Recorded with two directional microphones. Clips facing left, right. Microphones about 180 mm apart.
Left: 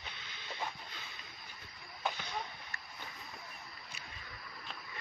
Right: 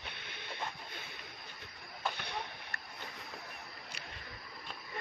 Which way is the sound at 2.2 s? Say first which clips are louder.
Even; 65° right (ahead or behind).